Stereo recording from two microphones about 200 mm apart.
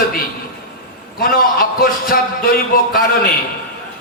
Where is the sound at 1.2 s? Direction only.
45° left (ahead or behind).